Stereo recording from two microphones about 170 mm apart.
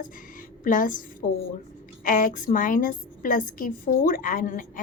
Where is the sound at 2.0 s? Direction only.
50° left (ahead or behind).